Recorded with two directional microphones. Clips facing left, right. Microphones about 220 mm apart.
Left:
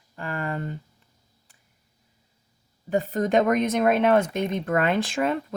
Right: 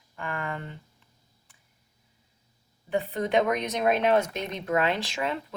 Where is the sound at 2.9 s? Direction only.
45° left (ahead or behind).